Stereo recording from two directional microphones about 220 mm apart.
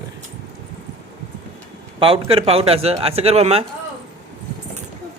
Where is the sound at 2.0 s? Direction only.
25° right (ahead or behind).